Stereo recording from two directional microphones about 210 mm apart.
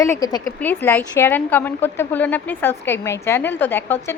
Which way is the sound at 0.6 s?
10° left (ahead or behind).